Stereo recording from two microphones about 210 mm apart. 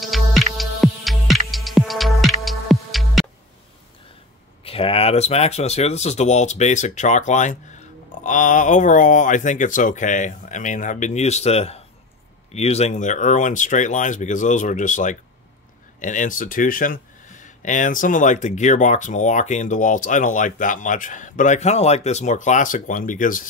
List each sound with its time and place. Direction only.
0.0 s music: centre (ahead or behind)
4.6 s speech: 25° left (ahead or behind)